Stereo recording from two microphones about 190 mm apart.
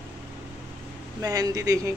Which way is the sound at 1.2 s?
20° right (ahead or behind).